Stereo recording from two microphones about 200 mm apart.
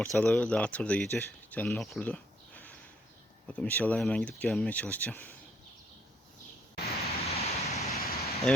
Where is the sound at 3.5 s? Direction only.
10° left (ahead or behind).